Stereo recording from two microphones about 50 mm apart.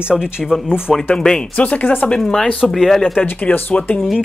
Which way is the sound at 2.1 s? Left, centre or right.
Centre.